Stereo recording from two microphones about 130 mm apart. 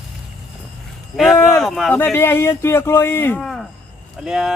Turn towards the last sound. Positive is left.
turn(degrees=-5)  # may be behind; listen again after turning